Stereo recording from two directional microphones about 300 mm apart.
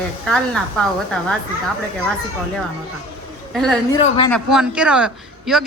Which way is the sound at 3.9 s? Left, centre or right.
Centre.